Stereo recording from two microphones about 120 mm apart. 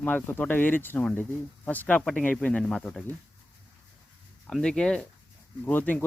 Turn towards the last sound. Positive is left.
turn(degrees=15)  # may be behind; listen again after turning